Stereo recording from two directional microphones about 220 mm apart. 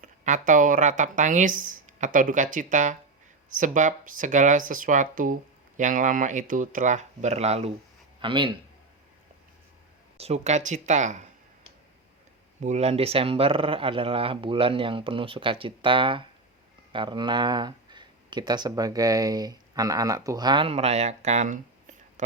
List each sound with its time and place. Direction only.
0.0 s speech: 35° right (ahead or behind)
10.2 s speech: 30° right (ahead or behind)
12.6 s speech: 30° right (ahead or behind)